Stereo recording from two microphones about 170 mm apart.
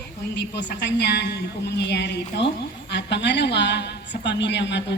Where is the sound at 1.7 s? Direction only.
90° left.